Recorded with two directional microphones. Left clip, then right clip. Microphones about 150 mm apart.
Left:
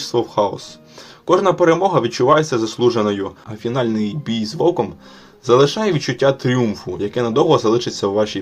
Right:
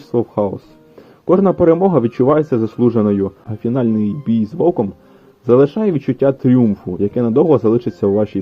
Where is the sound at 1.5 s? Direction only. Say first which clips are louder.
Right 2 dB; 45° right (ahead or behind).